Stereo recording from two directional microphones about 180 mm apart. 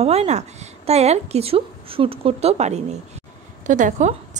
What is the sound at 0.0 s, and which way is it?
A woman's voice, 35° right (ahead or behind).